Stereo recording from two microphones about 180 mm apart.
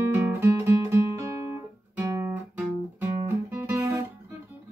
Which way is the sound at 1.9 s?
15° right (ahead or behind).